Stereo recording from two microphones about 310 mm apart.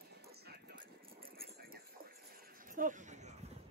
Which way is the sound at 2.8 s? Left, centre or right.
Right.